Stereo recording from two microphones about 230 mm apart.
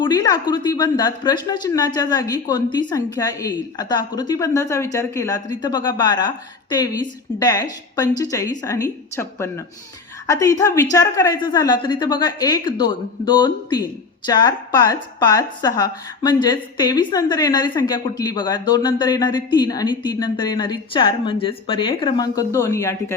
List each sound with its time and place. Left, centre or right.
0.0 s a woman's voice: centre